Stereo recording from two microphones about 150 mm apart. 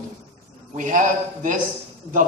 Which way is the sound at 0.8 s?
60° right (ahead or behind).